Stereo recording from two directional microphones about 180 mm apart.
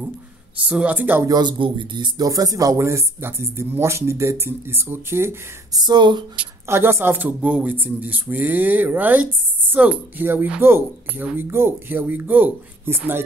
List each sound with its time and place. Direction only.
0.7 s speech: 10° right (ahead or behind)
1.3 s speech: 25° right (ahead or behind)
5.8 s speech: 25° right (ahead or behind)
6.3 s speech: 15° right (ahead or behind)